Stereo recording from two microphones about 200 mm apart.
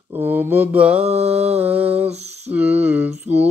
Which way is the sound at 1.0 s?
30° right (ahead or behind).